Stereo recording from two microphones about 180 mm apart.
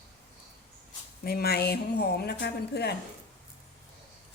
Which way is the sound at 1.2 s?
60° left (ahead or behind).